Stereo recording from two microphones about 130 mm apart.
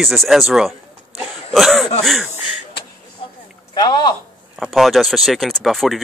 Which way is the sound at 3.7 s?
35° left (ahead or behind).